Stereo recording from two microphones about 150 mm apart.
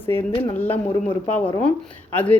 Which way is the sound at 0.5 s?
10° left (ahead or behind).